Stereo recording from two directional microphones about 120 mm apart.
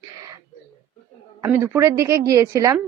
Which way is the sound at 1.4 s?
20° right (ahead or behind).